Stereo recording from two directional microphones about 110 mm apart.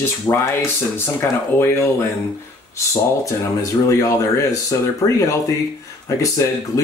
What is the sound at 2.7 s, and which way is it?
Speech, 30° left (ahead or behind).